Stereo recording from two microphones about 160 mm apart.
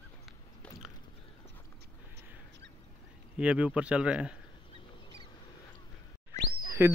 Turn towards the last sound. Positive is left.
turn(degrees=-15)  # may be behind; listen again after turning